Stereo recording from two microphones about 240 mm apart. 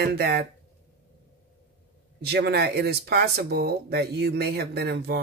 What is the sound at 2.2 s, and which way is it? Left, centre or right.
Speech, right.